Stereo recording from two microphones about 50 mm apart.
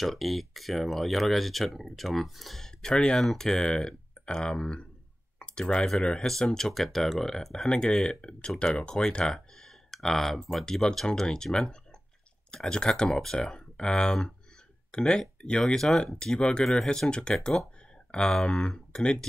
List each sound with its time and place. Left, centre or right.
0.0 s speech: centre
5.4 s clicking: left
5.8 s speech: centre